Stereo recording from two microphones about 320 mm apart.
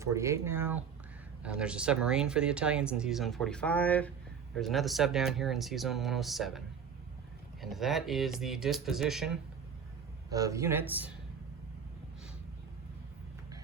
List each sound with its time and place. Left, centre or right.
0.0 s speech: centre
7.6 s speech: centre